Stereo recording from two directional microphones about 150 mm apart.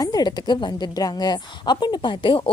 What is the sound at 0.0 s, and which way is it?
A woman's voice, 25° left (ahead or behind).